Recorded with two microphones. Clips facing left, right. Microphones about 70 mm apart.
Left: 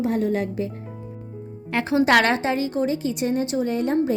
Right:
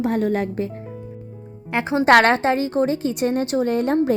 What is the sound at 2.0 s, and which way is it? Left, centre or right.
A woman's voice, right.